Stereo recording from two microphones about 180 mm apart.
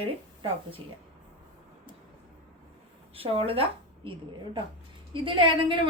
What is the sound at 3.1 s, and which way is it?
Speech, 30° right (ahead or behind).